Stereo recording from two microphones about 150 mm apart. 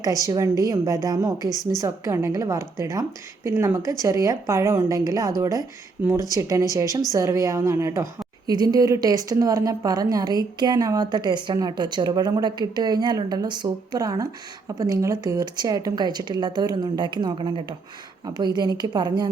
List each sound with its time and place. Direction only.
0.3 s a woman's voice: 20° right (ahead or behind)